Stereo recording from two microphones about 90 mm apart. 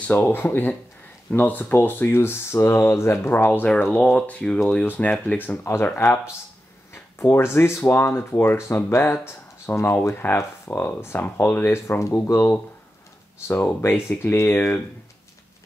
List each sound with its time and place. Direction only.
0.1 s speech: 25° left (ahead or behind)
3.4 s speech: 15° left (ahead or behind)